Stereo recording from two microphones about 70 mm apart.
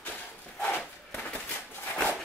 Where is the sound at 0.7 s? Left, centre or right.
Left.